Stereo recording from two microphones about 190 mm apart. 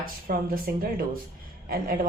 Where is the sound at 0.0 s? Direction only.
50° right (ahead or behind).